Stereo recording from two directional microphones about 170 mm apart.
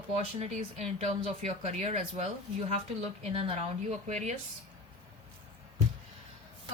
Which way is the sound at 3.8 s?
40° right (ahead or behind).